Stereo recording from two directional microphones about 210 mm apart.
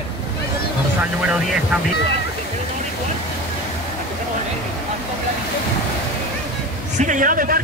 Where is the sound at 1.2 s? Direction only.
5° right (ahead or behind).